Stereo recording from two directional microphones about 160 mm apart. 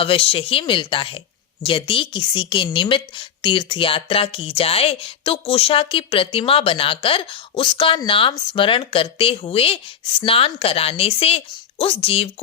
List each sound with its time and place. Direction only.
0.0 s a woman's voice: 35° left (ahead or behind)